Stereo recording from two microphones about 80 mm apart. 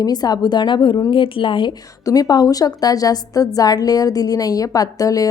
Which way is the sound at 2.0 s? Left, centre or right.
Left.